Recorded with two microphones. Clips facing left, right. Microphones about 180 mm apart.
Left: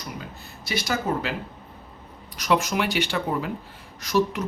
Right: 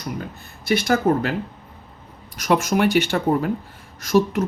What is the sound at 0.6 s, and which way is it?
Speech, 55° right (ahead or behind).